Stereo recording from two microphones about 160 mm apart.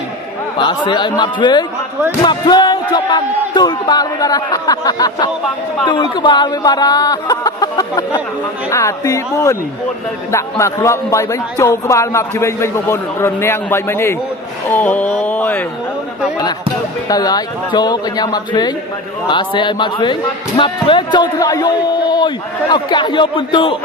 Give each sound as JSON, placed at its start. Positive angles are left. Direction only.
{"t": 0.6, "sound": "a man's voice", "side_deg": 30}
{"t": 15.1, "sound": "a sound", "side_deg": 10}
{"t": 17.1, "sound": "speech", "side_deg": 25}